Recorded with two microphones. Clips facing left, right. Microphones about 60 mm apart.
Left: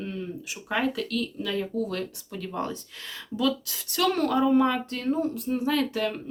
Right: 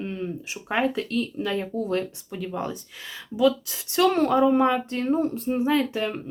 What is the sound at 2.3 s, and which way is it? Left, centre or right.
Speech, centre.